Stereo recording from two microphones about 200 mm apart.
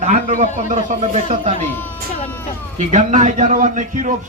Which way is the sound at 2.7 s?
40° right (ahead or behind).